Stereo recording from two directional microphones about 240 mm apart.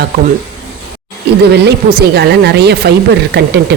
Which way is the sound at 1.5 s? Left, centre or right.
Right.